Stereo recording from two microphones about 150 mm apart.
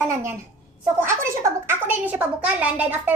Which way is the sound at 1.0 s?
15° right (ahead or behind).